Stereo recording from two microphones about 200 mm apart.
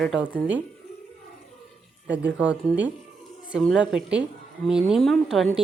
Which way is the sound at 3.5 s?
Centre (ahead or behind).